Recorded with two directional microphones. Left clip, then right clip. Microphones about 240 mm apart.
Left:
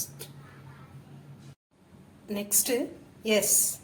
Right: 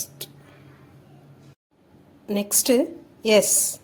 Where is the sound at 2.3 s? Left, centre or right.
Right.